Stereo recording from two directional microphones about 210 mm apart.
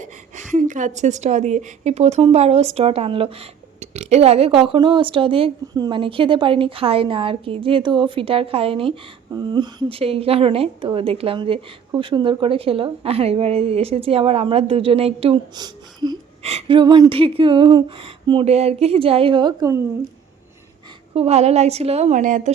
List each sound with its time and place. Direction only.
0.0 s a woman's voice: 35° right (ahead or behind); by 19.8 s 15° right (ahead or behind)
21.1 s a woman's voice: 30° right (ahead or behind)